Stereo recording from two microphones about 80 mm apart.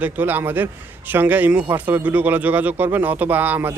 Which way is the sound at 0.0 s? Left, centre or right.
Right.